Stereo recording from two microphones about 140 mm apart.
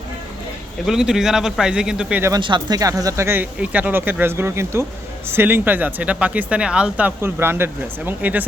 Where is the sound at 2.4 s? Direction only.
35° right (ahead or behind); by 8.4 s 10° right (ahead or behind).